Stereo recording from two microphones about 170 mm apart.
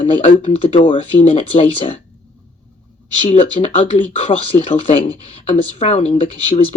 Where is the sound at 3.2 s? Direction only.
35° left (ahead or behind).